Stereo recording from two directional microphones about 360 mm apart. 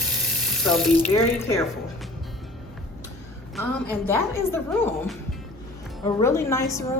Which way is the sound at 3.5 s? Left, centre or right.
Centre.